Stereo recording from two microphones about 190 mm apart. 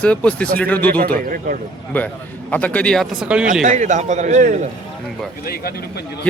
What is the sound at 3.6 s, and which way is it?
A man's voice, 40° right (ahead or behind).